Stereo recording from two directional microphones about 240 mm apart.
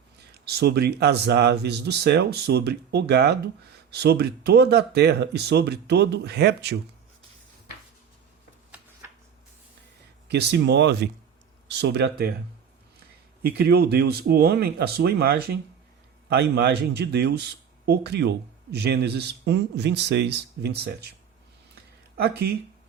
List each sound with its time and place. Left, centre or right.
0.2 s speech: right
10.2 s speech: right
13.4 s speech: right